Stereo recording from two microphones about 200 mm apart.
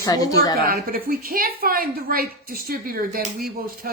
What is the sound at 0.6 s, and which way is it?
A woman's voice, 50° right (ahead or behind).